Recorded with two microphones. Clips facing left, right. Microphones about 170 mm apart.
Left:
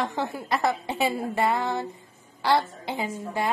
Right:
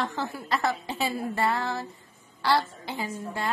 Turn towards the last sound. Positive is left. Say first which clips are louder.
# left 4 dB
turn(degrees=20)  # may be behind; listen again after turning